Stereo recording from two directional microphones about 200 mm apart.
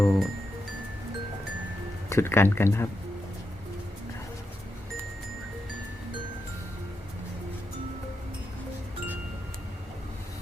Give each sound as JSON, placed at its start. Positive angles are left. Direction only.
{"t": 0.0, "sound": "music", "side_deg": 0}
{"t": 2.0, "sound": "speech", "side_deg": 10}